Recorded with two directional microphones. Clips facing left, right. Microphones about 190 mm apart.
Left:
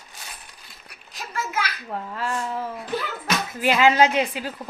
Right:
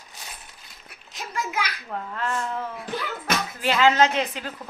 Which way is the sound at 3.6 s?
15° left (ahead or behind).